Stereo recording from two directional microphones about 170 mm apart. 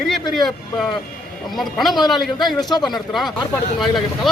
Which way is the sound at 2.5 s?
25° left (ahead or behind).